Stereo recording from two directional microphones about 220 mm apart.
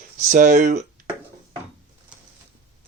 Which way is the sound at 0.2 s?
35° right (ahead or behind).